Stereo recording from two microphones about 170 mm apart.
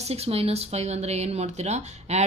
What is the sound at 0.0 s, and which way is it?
Speech, 35° right (ahead or behind).